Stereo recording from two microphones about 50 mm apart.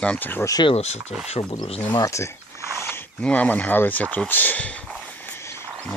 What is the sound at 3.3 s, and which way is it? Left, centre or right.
Speech, left.